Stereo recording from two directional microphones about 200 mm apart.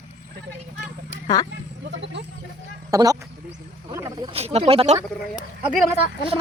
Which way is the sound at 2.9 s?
15° right (ahead or behind).